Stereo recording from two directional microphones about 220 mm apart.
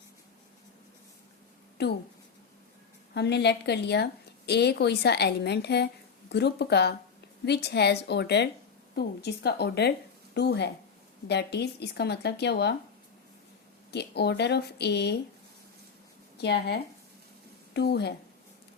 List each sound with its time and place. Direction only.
1.8 s a woman's voice: 50° left (ahead or behind)
3.2 s a woman's voice: 50° left (ahead or behind)
13.9 s a woman's voice: 50° left (ahead or behind)
16.4 s a woman's voice: 50° left (ahead or behind)